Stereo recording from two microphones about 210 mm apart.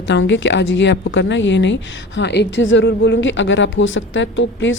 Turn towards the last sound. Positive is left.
turn(degrees=60)  # may be behind; listen again after turning